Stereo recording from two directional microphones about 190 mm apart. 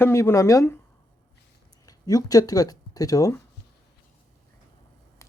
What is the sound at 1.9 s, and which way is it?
Speech, 20° left (ahead or behind).